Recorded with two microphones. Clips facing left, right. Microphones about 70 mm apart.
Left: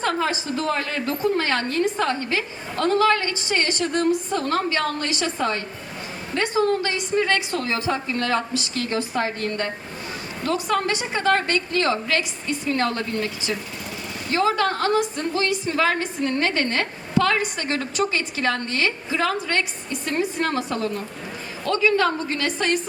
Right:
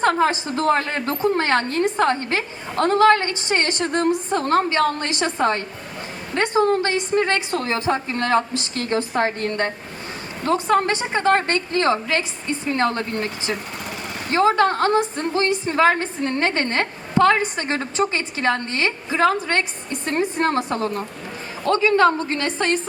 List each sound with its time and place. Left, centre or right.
0.0 s a woman's voice: right